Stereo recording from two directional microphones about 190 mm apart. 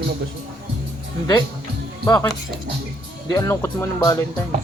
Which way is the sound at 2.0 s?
20° left (ahead or behind).